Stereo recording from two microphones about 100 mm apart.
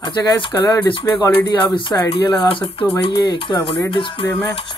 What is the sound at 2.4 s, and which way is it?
Speech, 65° left (ahead or behind).